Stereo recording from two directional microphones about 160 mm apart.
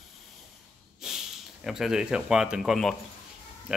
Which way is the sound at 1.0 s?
Centre (ahead or behind).